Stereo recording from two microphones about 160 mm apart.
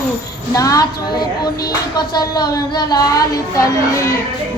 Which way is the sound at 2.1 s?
25° left (ahead or behind).